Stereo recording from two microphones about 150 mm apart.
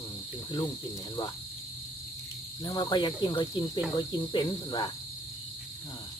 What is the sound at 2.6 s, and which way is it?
Cricket, 30° left (ahead or behind).